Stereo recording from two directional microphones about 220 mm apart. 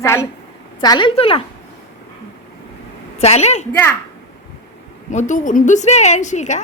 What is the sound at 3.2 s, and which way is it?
Speech, 30° left (ahead or behind).